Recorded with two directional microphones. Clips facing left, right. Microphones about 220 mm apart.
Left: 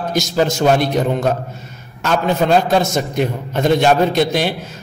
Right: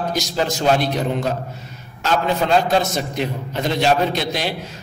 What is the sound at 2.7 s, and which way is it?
A man's voice, 50° left (ahead or behind).